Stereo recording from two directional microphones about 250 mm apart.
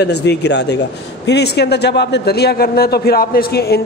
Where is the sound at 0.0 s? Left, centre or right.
Left.